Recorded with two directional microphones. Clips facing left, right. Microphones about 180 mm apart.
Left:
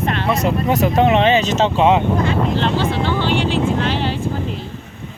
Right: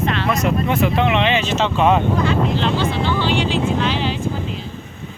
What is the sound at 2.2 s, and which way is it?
Speech, 55° left (ahead or behind).